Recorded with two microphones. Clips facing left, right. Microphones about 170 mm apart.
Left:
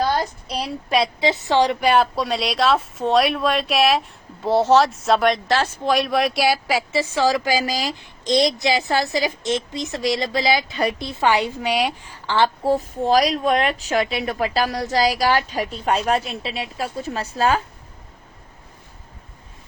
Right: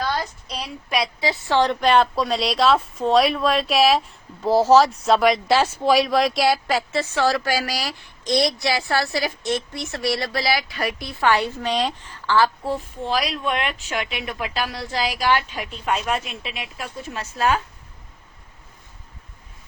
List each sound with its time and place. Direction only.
0.0 s a woman's voice: 35° left (ahead or behind); by 6.7 s centre (ahead or behind)
6.9 s a woman's voice: 10° left (ahead or behind)
12.6 s a woman's voice: 40° left (ahead or behind)